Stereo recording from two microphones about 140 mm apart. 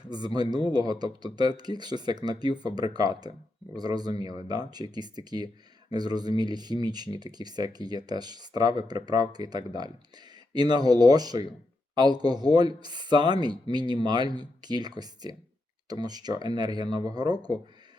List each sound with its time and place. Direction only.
0.7 s speech: 30° right (ahead or behind)